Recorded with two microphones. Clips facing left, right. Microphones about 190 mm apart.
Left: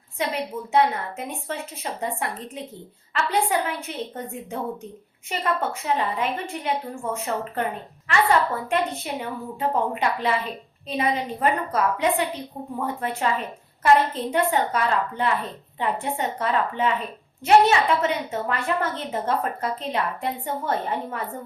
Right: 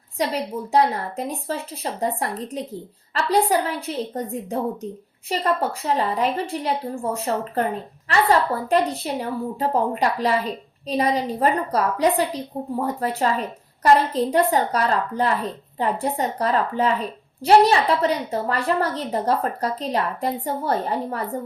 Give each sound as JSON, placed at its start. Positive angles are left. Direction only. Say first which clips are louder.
{"t": 0.2, "sound": "a woman's voice", "louder": "right 3 dB", "side_deg": -35}